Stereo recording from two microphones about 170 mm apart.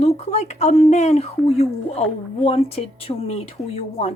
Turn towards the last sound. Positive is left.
turn(degrees=35)  # may be behind; listen again after turning